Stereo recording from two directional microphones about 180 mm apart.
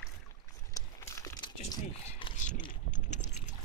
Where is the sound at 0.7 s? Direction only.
15° left (ahead or behind).